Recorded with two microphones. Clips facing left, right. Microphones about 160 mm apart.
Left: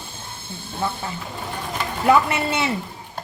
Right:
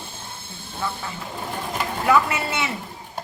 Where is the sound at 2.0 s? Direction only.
30° left (ahead or behind).